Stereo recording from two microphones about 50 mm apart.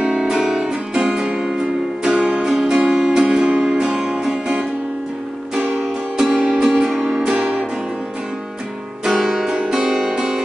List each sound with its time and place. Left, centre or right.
0.0 s music: centre
0.9 s music: centre
5.7 s music: centre
7.1 s music: centre
7.3 s music: right
9.2 s music: centre